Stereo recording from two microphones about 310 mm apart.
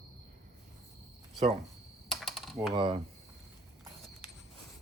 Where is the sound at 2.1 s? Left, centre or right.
Centre.